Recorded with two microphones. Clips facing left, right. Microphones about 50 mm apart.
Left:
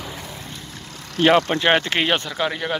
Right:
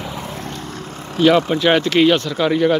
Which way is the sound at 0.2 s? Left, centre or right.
Right.